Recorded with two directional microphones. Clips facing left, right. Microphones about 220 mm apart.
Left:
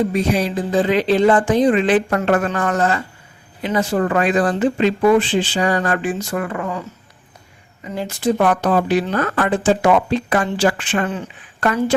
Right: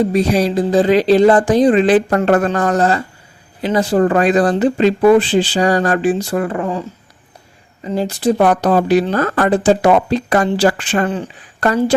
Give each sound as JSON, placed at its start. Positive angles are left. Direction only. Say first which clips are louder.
{"t": 0.0, "sound": "speech", "louder": "right 4 dB", "side_deg": -35}
{"t": 7.9, "sound": "speech", "louder": "right 4 dB", "side_deg": -35}